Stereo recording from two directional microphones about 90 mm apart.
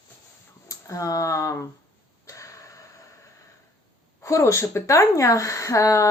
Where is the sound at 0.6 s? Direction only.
35° left (ahead or behind).